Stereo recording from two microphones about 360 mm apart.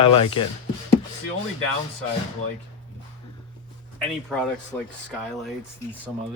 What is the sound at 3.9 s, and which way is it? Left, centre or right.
Speech, centre.